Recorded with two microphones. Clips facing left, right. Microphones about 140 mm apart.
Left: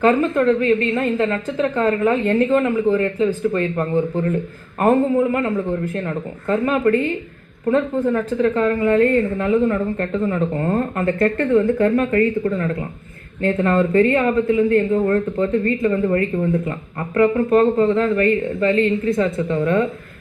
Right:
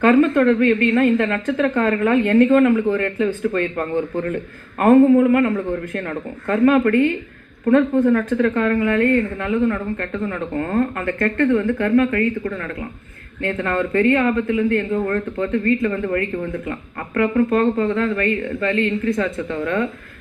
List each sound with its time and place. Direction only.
0.0 s speech: 25° left (ahead or behind)
8.4 s speech: 25° left (ahead or behind)